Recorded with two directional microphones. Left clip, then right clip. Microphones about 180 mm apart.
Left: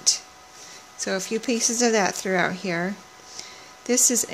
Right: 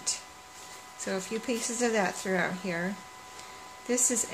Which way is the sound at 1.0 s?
55° left (ahead or behind).